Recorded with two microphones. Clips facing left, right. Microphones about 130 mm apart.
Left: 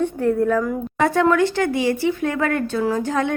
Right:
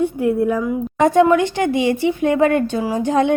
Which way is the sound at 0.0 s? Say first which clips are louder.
Right 2 dB; 10° right (ahead or behind).